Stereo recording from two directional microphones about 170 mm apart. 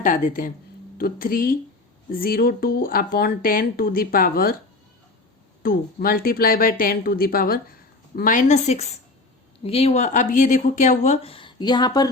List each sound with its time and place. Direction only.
0.0 s speech: 50° left (ahead or behind)
5.6 s speech: 60° left (ahead or behind); by 12.0 s 25° left (ahead or behind)